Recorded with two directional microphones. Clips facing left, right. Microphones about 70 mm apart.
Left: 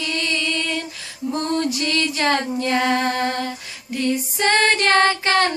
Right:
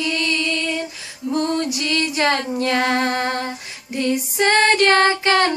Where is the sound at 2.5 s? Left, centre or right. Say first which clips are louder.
Right 1 dB; right.